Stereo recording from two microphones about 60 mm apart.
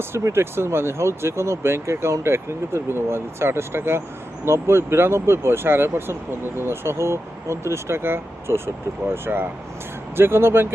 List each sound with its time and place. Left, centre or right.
0.1 s speech: right